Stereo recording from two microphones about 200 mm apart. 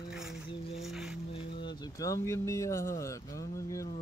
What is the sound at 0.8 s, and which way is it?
Music, centre (ahead or behind).